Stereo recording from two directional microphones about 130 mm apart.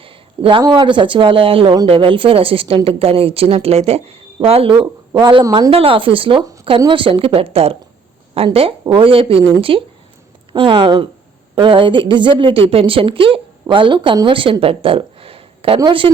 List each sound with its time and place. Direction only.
0.0 s a sound: 45° right (ahead or behind)
0.6 s a woman's voice: 35° right (ahead or behind)
5.7 s a woman's voice: 45° right (ahead or behind)